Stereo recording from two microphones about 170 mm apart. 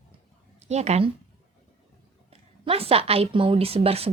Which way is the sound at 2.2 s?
35° right (ahead or behind).